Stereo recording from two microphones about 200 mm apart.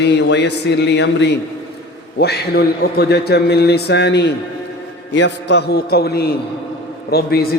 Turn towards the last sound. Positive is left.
turn(degrees=50)  # may be behind; listen again after turning